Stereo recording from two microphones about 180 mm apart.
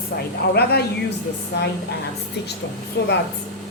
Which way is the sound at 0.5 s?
65° left (ahead or behind).